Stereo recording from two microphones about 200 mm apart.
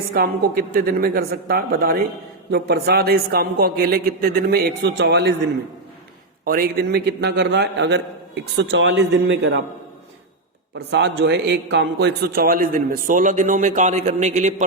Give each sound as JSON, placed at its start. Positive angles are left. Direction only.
{"t": 0.1, "sound": "a man's voice", "side_deg": -50}
{"t": 6.4, "sound": "a man's voice", "side_deg": -45}
{"t": 10.8, "sound": "a man's voice", "side_deg": -55}